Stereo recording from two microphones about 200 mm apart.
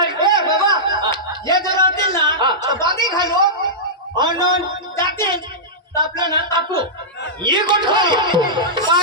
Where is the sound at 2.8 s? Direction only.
20° right (ahead or behind).